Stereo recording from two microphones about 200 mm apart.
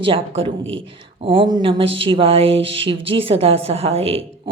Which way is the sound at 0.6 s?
70° right (ahead or behind).